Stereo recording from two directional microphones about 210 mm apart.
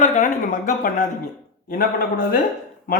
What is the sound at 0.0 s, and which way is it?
Speech, 35° left (ahead or behind).